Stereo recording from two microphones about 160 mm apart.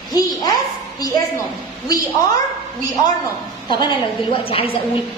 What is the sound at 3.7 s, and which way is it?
A woman's voice, 30° left (ahead or behind).